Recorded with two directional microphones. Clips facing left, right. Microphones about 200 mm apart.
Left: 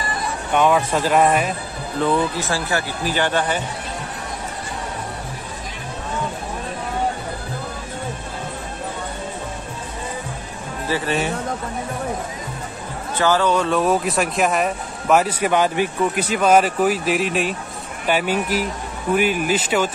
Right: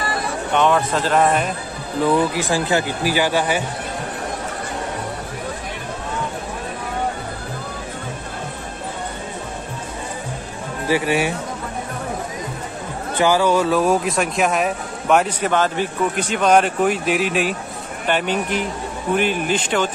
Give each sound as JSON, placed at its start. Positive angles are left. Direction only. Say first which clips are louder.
{"t": 0.6, "sound": "a man's voice", "louder": "left 1 dB", "side_deg": 10}
{"t": 2.0, "sound": "speech", "louder": "right 3 dB", "side_deg": -15}
{"t": 10.9, "sound": "speech", "louder": "right 3 dB", "side_deg": -15}
{"t": 13.1, "sound": "a man's voice", "louder": "right 2 dB", "side_deg": -15}